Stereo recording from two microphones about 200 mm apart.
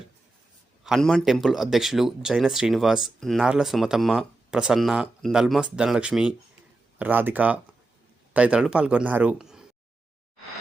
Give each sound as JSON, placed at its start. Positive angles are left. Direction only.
{"t": 0.9, "sound": "speech", "side_deg": 0}